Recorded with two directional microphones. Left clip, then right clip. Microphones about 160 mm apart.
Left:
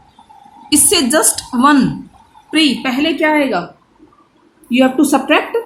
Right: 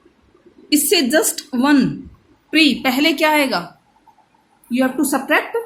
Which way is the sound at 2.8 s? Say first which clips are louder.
Left 1 dB; 70° right (ahead or behind).